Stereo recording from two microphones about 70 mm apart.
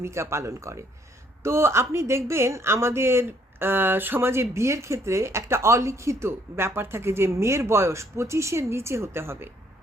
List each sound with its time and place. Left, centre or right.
0.0 s a woman's voice: right